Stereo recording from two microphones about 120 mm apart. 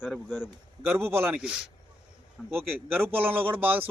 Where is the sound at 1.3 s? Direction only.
5° right (ahead or behind).